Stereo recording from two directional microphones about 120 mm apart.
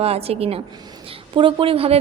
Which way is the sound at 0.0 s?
55° right (ahead or behind).